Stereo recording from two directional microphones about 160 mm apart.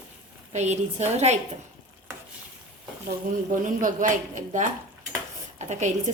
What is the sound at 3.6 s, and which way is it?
Speech, 55° right (ahead or behind).